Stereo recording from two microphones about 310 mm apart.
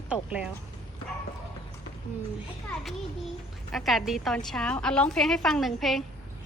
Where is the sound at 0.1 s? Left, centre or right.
Centre.